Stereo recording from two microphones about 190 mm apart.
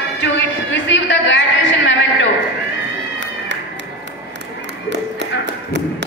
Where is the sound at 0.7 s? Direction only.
75° left (ahead or behind).